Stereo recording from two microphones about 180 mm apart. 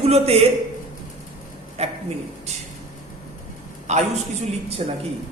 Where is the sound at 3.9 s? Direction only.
40° right (ahead or behind).